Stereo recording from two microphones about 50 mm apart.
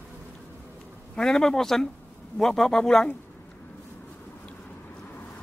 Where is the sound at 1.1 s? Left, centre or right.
Centre.